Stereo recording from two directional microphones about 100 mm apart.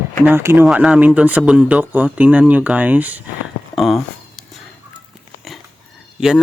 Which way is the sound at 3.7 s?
Centre (ahead or behind).